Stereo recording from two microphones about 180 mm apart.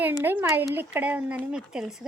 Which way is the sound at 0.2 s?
10° right (ahead or behind).